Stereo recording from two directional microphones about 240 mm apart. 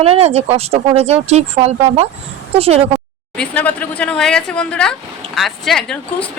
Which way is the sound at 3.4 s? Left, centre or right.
Centre.